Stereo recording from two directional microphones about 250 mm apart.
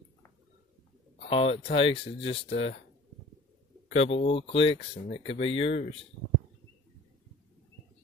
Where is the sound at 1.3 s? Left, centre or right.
Left.